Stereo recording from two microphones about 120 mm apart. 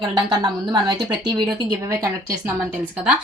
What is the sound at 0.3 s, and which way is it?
Speech, 35° right (ahead or behind).